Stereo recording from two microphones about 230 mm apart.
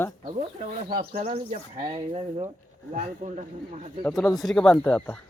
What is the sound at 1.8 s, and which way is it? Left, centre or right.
Speech, centre.